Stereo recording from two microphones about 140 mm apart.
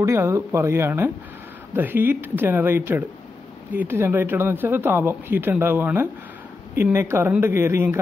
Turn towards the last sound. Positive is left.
turn(degrees=-15)  # may be behind; listen again after turning